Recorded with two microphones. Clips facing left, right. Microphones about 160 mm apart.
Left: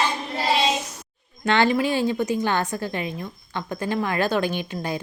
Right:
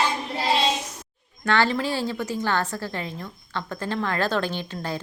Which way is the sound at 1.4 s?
20° left (ahead or behind).